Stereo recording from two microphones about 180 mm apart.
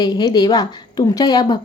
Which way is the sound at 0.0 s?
20° left (ahead or behind).